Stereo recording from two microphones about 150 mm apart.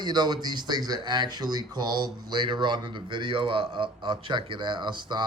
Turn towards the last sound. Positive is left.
turn(degrees=-30)  # may be behind; listen again after turning